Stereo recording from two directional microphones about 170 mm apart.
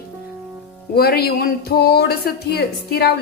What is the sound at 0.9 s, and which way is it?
A woman's voice, 65° left (ahead or behind).